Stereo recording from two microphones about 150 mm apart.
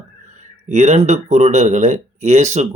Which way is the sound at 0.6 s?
50° right (ahead or behind).